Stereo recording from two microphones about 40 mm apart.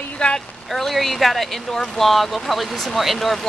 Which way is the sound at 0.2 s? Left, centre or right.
Left.